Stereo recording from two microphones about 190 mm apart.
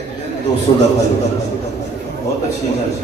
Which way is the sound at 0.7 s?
30° left (ahead or behind).